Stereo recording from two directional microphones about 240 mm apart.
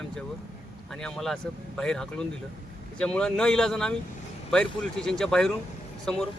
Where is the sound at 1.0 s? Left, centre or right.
Centre.